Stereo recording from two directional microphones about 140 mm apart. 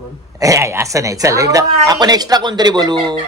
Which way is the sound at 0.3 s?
25° right (ahead or behind).